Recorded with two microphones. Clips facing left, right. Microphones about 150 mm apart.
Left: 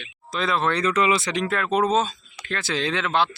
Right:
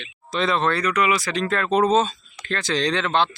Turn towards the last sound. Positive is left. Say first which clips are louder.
# right 2 dB
turn(degrees=5)  # may be behind; listen again after turning